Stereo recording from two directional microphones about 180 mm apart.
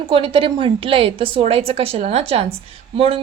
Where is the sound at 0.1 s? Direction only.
30° right (ahead or behind).